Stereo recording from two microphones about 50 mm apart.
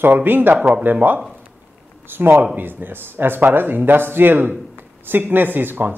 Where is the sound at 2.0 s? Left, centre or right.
Right.